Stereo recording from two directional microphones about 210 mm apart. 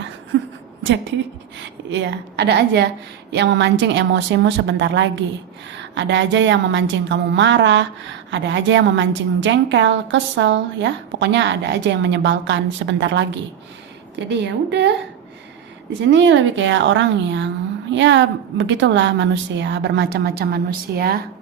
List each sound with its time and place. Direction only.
0.3 s a sound: 55° right (ahead or behind)
0.8 s a woman's voice: 60° right (ahead or behind)
14.3 s a woman's voice: 55° right (ahead or behind)